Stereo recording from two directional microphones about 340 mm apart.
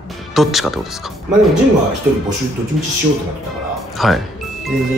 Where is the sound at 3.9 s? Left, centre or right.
Centre.